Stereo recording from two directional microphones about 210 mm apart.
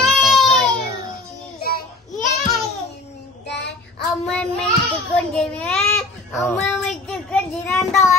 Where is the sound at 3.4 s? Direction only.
55° left (ahead or behind).